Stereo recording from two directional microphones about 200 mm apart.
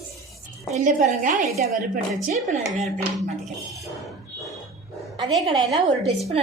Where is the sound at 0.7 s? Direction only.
35° right (ahead or behind).